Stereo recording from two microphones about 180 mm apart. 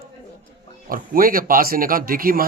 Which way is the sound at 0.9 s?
55° right (ahead or behind).